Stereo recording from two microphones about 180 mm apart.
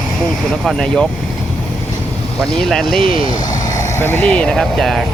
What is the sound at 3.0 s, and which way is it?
Speech, 50° left (ahead or behind).